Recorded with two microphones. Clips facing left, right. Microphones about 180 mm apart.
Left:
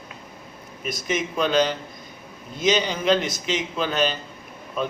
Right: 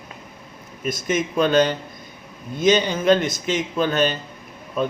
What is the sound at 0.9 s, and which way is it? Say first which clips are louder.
A man's voice: right 4 dB; 50° right (ahead or behind).